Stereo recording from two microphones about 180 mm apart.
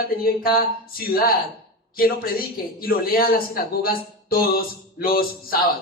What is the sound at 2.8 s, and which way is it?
A man's voice, 55° left (ahead or behind).